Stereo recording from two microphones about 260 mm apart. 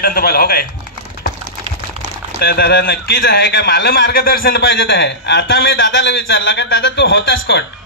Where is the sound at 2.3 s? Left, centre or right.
Left.